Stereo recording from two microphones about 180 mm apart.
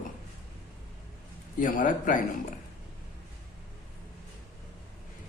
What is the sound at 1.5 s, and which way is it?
Speech, 50° left (ahead or behind).